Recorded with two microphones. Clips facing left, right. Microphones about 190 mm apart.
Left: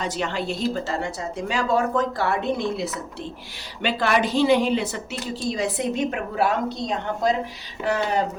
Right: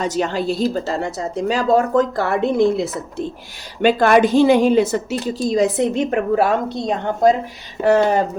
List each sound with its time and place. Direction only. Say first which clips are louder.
0.0 s a woman's voice: right 6 dB; 40° right (ahead or behind)